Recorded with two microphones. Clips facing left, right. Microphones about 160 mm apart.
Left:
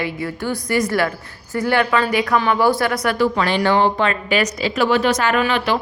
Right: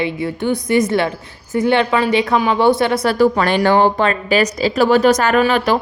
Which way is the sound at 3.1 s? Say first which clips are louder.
Right 4 dB; 45° right (ahead or behind).